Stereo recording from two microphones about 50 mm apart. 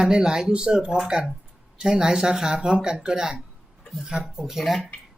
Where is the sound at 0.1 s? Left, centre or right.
Centre.